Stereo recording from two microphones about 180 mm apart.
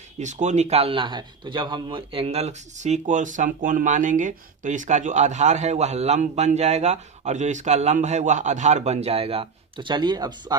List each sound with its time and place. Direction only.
0.2 s a man's voice: 40° right (ahead or behind); by 10.6 s 25° right (ahead or behind)